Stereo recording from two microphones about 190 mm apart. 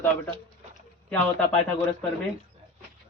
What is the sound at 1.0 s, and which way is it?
Speech, 5° left (ahead or behind).